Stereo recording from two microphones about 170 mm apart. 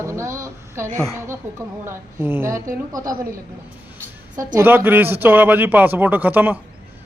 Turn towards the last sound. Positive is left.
turn(degrees=-10)  # may be behind; listen again after turning